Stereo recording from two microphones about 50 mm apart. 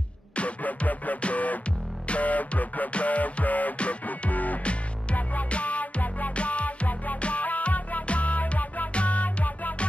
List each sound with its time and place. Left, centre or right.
0.4 s music: left